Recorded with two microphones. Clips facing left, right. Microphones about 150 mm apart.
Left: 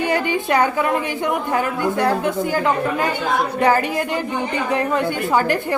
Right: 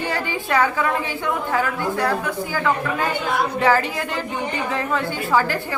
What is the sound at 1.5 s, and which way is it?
A woman's voice, 20° left (ahead or behind).